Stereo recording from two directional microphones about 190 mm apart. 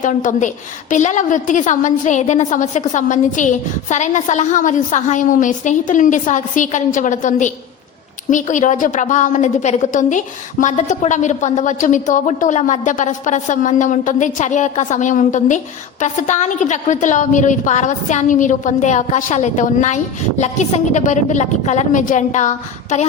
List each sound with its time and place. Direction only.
0.0 s a woman's voice: 40° left (ahead or behind)